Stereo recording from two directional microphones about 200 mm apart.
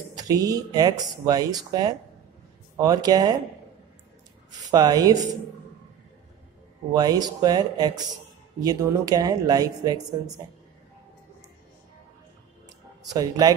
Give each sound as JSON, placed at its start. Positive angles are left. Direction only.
{"t": 0.1, "sound": "speech", "side_deg": -20}
{"t": 4.5, "sound": "speech", "side_deg": -20}
{"t": 6.9, "sound": "speech", "side_deg": -20}
{"t": 13.1, "sound": "speech", "side_deg": -20}